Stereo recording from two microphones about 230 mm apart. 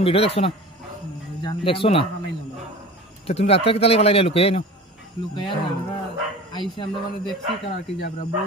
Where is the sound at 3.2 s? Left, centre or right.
Left.